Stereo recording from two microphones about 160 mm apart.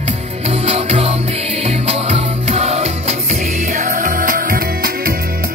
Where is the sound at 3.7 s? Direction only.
55° right (ahead or behind).